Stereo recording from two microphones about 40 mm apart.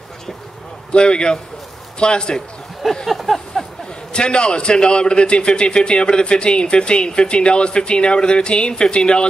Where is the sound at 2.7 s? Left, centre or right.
Centre.